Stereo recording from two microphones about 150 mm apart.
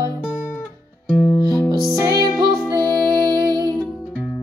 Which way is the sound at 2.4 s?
25° right (ahead or behind).